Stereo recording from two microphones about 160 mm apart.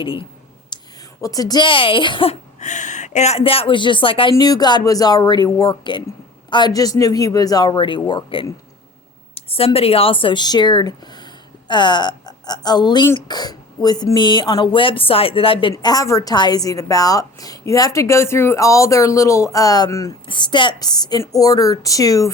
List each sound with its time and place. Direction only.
0.0 s speech: 30° left (ahead or behind)
0.7 s a sound: 25° left (ahead or behind)
1.2 s a woman's voice: 20° left (ahead or behind)
15.7 s a woman's voice: 25° left (ahead or behind)